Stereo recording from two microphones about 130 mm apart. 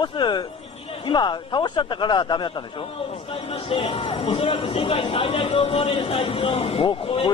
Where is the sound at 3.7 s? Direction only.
45° left (ahead or behind).